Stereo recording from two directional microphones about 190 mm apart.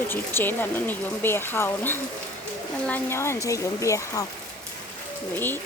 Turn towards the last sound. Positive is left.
turn(degrees=10)  # may be behind; listen again after turning